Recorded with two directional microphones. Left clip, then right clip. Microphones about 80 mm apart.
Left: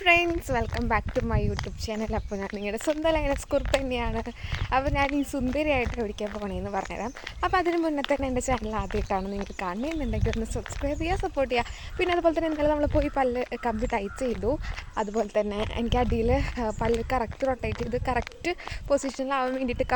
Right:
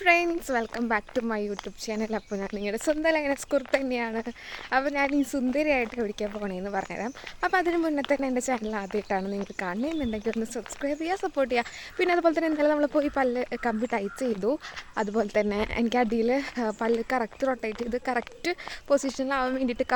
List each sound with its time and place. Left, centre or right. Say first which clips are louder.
0.0 s a woman's voice: left 1 dB; right
4.9 s speech: even; right
10.4 s speech: even; right
12.0 s speech: right 1 dB; right
14.4 s speech: right 1 dB; right
16.1 s speech: even; right